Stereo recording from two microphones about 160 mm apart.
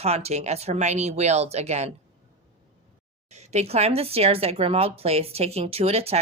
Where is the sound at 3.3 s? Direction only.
45° right (ahead or behind).